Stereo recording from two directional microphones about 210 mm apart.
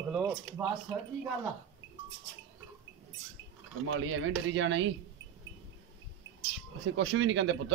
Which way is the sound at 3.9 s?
70° right (ahead or behind).